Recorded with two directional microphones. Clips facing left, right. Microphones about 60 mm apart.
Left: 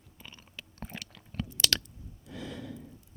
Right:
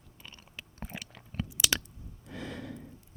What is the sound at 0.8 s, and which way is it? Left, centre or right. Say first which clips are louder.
Biting: even; centre.